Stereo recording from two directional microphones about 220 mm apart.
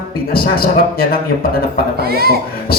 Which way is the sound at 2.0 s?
45° right (ahead or behind).